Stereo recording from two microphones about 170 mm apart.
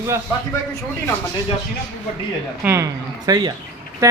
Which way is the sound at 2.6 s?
15° right (ahead or behind).